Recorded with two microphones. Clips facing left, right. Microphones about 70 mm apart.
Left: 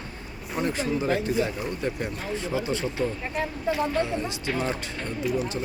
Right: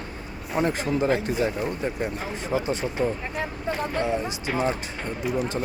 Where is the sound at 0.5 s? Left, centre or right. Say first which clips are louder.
Right 2 dB; right.